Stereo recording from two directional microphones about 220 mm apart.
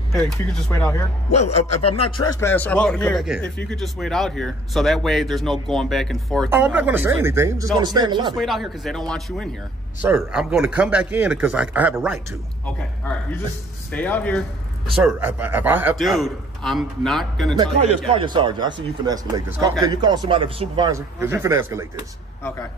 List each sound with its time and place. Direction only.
0.1 s speech: 10° left (ahead or behind)
1.9 s speech: 25° left (ahead or behind)
2.4 s speech: 10° left (ahead or behind); by 8.4 s 20° right (ahead or behind)
8.4 s speech: centre (ahead or behind)
13.9 s speech: 5° left (ahead or behind)
18.0 s a man's voice: 20° right (ahead or behind)